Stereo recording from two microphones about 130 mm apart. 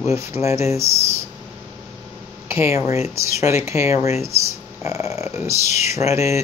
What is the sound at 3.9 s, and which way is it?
Speech, 55° left (ahead or behind).